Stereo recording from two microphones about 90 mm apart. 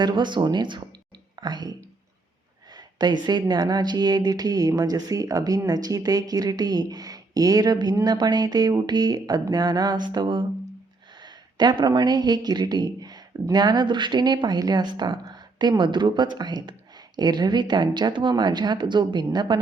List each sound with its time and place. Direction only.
0.0 s speech: 60° right (ahead or behind)
2.7 s a woman's voice: 55° right (ahead or behind)
11.2 s a sound: 55° right (ahead or behind)
11.9 s a woman's voice: 50° right (ahead or behind)